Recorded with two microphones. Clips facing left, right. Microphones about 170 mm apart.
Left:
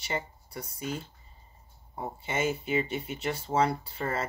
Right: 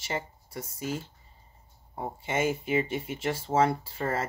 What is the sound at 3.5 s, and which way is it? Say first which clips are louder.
Speech: right 2 dB; 35° right (ahead or behind).